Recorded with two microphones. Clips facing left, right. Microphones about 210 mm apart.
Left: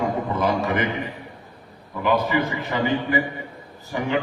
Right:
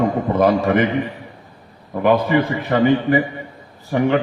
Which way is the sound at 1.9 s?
55° right (ahead or behind).